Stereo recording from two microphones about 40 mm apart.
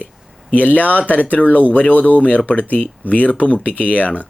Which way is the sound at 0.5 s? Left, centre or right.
Left.